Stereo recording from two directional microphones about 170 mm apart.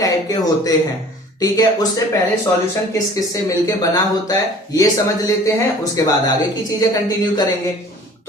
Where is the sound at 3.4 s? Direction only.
20° left (ahead or behind).